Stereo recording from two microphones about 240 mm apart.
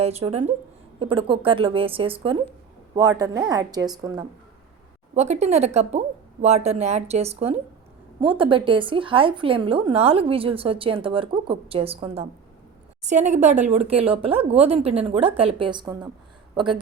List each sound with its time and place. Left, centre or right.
0.0 s a woman's voice: right
5.1 s a woman's voice: right